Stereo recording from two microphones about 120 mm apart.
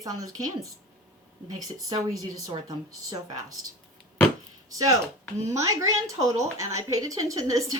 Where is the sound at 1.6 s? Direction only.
30° right (ahead or behind).